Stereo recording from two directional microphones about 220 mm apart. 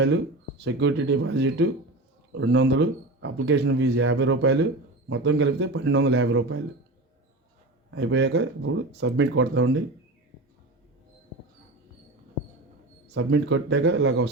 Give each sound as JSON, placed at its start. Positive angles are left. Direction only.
{"t": 0.6, "sound": "a man's voice", "side_deg": -55}
{"t": 7.9, "sound": "speech", "side_deg": -55}
{"t": 13.1, "sound": "a man's voice", "side_deg": -55}